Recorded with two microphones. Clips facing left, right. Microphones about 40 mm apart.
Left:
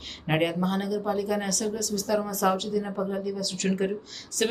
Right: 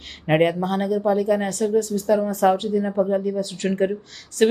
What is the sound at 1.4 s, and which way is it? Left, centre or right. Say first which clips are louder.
Speech: right 8 dB; right.